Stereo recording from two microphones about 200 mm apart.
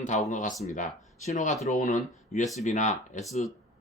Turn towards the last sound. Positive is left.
turn(degrees=35)  # may be behind; listen again after turning